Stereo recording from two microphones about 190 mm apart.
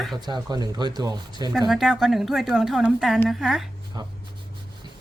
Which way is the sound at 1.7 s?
Centre (ahead or behind).